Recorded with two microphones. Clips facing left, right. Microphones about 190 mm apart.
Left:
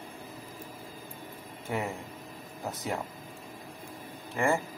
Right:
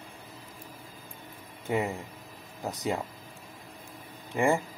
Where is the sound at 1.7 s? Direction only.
20° right (ahead or behind).